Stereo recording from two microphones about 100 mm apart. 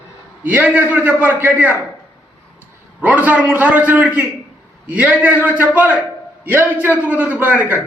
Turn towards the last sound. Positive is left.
turn(degrees=-20)  # may be behind; listen again after turning